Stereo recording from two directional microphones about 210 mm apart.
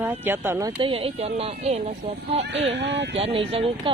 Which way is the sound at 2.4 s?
55° right (ahead or behind).